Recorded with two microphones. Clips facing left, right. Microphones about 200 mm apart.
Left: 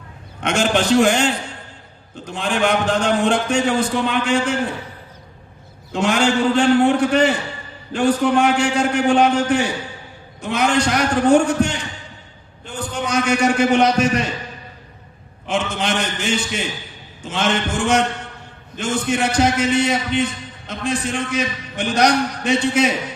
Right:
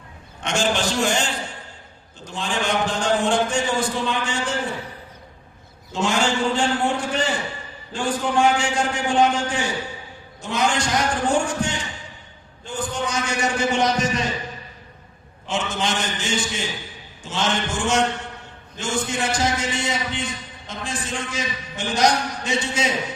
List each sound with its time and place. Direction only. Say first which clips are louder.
0.4 s a man's voice: left 5 dB; 55° left (ahead or behind)
5.9 s a man's voice: left 4 dB; 60° left (ahead or behind)
13.1 s a man's voice: left 10 dB; 60° left (ahead or behind)
15.4 s a man's voice: left 3 dB; 60° left (ahead or behind)